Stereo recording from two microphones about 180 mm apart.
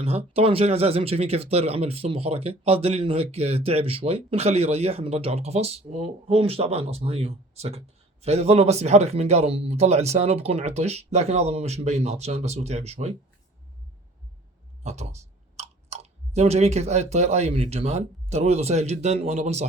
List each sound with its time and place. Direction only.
0.0 s speech: 35° right (ahead or behind)
14.8 s speech: 40° right (ahead or behind)